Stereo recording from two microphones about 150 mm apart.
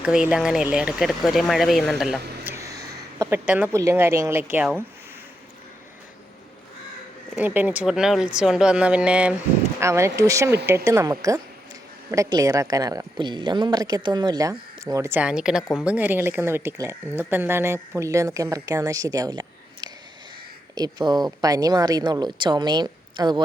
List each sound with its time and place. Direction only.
0.0 s speech: 5° right (ahead or behind)
2.4 s a sound: 15° right (ahead or behind)
3.7 s speech: 20° right (ahead or behind)
7.3 s speech: 10° right (ahead or behind)
9.8 s a woman's voice: 20° right (ahead or behind)
15.2 s a woman's voice: 5° right (ahead or behind); by 23.4 s 30° right (ahead or behind)